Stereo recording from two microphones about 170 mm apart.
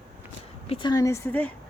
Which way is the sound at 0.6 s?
35° left (ahead or behind).